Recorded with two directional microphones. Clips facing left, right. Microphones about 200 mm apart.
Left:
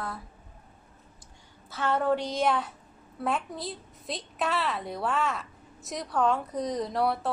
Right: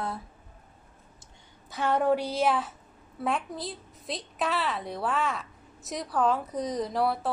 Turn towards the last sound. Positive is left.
turn(degrees=0)  # may be behind; listen again after turning